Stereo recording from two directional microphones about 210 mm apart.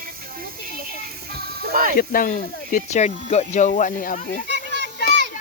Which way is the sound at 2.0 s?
40° left (ahead or behind).